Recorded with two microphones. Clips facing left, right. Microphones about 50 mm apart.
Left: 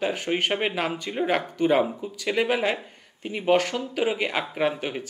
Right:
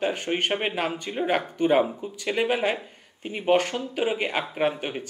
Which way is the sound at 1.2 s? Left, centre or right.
Centre.